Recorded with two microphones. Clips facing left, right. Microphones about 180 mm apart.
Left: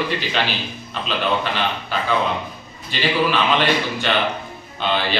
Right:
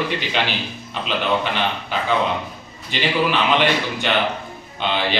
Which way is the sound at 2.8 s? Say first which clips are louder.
Even; 15° right (ahead or behind).